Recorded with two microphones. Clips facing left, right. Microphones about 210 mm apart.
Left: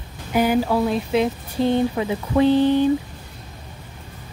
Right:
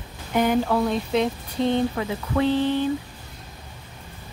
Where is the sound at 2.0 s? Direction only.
20° left (ahead or behind).